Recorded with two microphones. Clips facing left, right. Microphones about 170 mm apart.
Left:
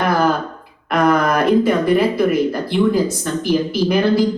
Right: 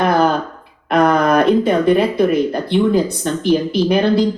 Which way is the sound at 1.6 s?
25° right (ahead or behind).